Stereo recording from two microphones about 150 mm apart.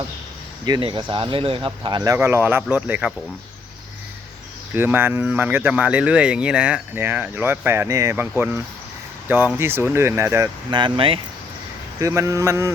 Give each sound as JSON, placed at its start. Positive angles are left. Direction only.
{"t": 0.6, "sound": "speech", "side_deg": -30}
{"t": 4.7, "sound": "speech", "side_deg": -15}
{"t": 10.7, "sound": "speech", "side_deg": -30}
{"t": 11.9, "sound": "speech", "side_deg": -20}